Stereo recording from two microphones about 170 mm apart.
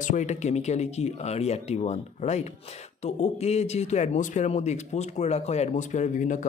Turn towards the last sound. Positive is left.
turn(degrees=50)  # may be behind; listen again after turning